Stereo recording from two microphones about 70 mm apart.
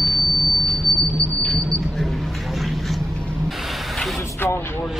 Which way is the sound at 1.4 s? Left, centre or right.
Centre.